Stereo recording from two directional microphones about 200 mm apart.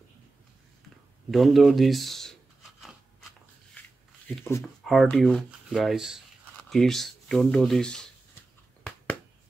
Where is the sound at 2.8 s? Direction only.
Centre (ahead or behind).